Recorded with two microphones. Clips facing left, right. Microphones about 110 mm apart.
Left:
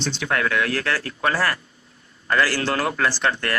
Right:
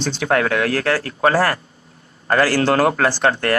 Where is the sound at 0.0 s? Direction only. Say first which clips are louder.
Right 5 dB; 45° right (ahead or behind).